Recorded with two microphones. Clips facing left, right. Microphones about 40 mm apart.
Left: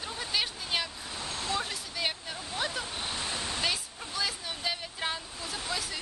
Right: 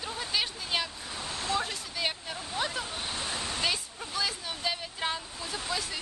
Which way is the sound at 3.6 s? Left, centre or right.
Centre.